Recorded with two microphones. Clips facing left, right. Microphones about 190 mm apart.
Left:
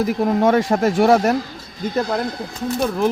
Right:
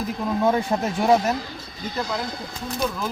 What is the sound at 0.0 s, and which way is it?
Speech, 75° left (ahead or behind).